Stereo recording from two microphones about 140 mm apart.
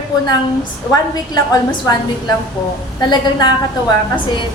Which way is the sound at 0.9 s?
25° left (ahead or behind).